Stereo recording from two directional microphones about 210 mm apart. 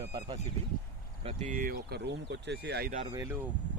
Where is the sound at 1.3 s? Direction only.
35° right (ahead or behind).